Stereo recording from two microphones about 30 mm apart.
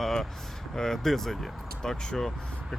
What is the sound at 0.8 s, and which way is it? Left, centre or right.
Speech, centre.